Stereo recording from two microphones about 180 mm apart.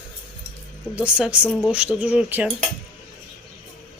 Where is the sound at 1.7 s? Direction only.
5° right (ahead or behind).